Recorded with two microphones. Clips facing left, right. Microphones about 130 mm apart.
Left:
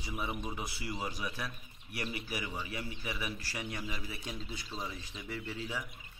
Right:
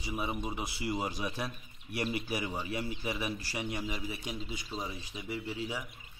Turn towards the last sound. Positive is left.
turn(degrees=-10)  # may be behind; listen again after turning